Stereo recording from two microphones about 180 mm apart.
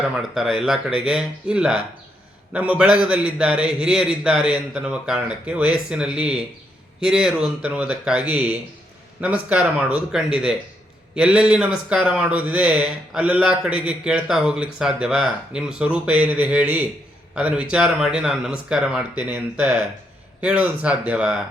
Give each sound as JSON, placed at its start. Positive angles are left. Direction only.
{"t": 0.2, "sound": "speech", "side_deg": 0}